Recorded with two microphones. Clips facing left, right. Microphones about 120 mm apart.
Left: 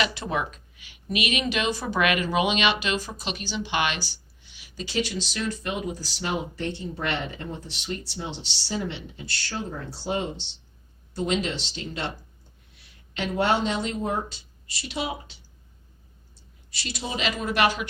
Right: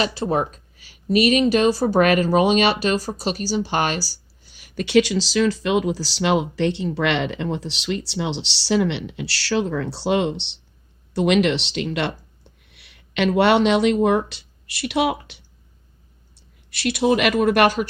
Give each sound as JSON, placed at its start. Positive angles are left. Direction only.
{"t": 0.0, "sound": "speech", "side_deg": -35}
{"t": 4.7, "sound": "speech", "side_deg": -65}